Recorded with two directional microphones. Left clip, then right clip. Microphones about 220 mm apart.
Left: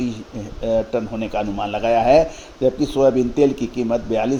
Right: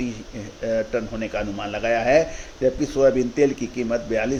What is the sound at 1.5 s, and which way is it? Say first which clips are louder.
Speech: left 5 dB; 90° left.